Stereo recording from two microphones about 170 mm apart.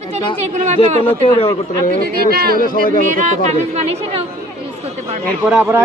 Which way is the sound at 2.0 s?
65° right (ahead or behind).